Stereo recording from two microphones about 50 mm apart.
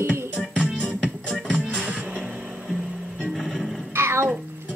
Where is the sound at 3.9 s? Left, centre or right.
Right.